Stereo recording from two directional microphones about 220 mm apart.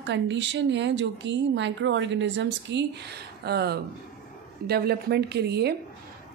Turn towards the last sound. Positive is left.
turn(degrees=-50)  # may be behind; listen again after turning